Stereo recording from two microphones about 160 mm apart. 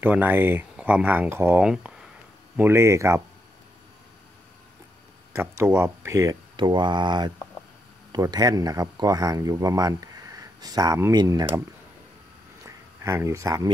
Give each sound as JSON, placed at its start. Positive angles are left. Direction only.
{"t": 0.0, "sound": "speech", "side_deg": -10}
{"t": 2.5, "sound": "speech", "side_deg": -15}
{"t": 5.6, "sound": "speech", "side_deg": -15}
{"t": 6.5, "sound": "speech", "side_deg": -30}
{"t": 12.6, "sound": "a sound", "side_deg": -20}